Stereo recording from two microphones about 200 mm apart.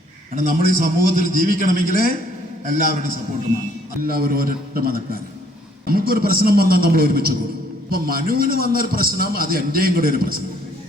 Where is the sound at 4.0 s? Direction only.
50° right (ahead or behind).